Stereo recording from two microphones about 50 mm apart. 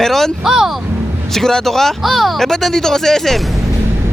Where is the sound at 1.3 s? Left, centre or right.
Centre.